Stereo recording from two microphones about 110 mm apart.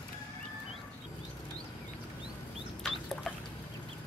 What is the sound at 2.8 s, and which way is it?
Rodents, 5° left (ahead or behind).